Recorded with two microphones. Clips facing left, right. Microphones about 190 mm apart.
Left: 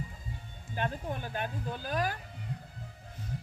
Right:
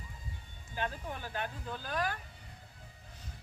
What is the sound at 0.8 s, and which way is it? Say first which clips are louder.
Speech: left 4 dB; 20° left (ahead or behind).